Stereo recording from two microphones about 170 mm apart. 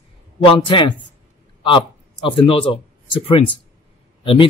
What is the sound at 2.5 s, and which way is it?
Speech, 30° left (ahead or behind).